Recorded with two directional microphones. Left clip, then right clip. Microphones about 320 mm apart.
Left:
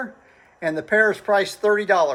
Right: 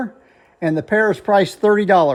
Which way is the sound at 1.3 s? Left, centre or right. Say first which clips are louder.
Right 4 dB; centre.